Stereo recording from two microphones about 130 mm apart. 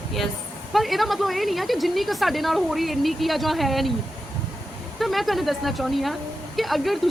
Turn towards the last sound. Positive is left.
turn(degrees=0)  # may be behind; listen again after turning